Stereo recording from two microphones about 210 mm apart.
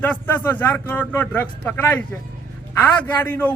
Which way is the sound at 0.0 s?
10° left (ahead or behind).